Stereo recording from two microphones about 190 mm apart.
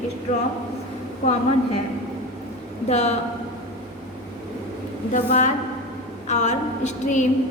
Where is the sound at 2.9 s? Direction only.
35° left (ahead or behind).